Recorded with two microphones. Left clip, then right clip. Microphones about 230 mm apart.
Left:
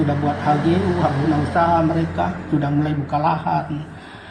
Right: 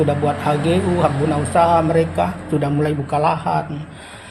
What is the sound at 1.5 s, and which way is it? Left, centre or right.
A man's voice, right.